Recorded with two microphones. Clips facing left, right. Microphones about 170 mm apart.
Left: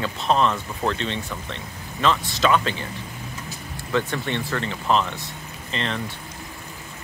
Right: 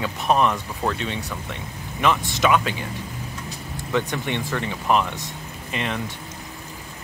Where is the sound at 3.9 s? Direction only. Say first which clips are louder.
Even; 15° right (ahead or behind).